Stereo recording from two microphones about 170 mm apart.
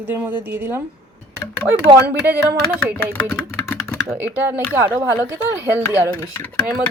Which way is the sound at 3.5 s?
15° left (ahead or behind).